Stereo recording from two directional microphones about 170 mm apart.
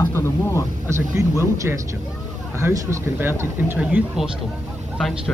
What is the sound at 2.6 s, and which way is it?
Speech, 15° right (ahead or behind).